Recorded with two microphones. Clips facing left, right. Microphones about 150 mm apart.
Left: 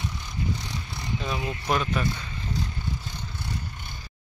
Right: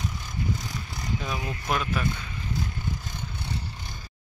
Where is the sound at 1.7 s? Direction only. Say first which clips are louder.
Left 2 dB; centre (ahead or behind).